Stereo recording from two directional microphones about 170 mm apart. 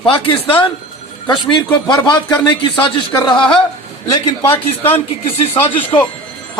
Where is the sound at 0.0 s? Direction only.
30° left (ahead or behind).